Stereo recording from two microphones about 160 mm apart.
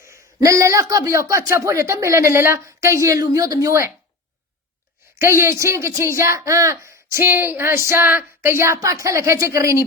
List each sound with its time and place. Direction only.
0.0 s speech: 20° right (ahead or behind)
5.2 s speech: 15° right (ahead or behind)